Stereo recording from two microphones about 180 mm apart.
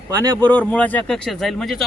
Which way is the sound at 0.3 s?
10° left (ahead or behind).